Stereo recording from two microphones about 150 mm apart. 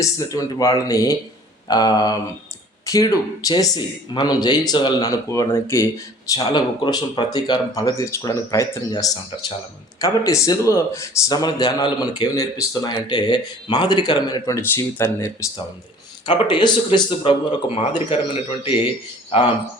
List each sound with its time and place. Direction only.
0.0 s speech: 20° left (ahead or behind)
16.2 s speech: 30° left (ahead or behind)